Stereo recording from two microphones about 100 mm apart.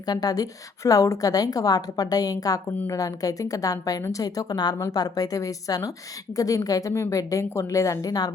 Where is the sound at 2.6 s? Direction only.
25° left (ahead or behind).